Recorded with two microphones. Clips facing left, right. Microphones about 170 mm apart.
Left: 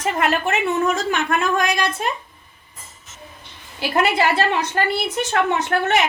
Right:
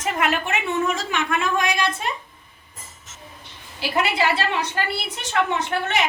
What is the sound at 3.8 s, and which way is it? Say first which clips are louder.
A woman's voice: left 3 dB; 50° left (ahead or behind).